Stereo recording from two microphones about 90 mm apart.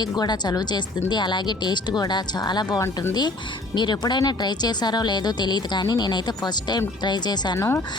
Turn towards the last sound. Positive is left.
turn(degrees=30)  # may be behind; listen again after turning